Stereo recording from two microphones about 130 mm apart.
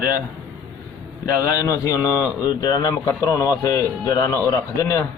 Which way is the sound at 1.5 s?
25° left (ahead or behind).